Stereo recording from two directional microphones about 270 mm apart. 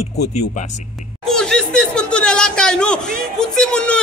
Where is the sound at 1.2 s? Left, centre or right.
Centre.